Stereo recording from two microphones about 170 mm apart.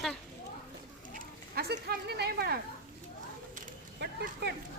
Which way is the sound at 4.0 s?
80° right.